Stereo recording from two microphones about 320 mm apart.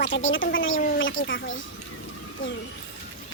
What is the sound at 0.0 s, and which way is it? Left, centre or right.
Speech, left.